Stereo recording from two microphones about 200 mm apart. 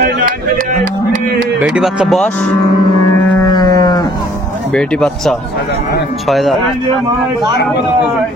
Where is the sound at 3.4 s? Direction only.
20° left (ahead or behind).